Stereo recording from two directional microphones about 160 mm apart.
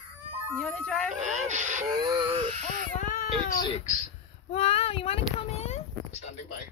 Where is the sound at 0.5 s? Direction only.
10° left (ahead or behind).